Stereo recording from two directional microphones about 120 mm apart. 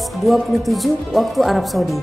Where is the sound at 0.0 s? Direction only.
Centre (ahead or behind).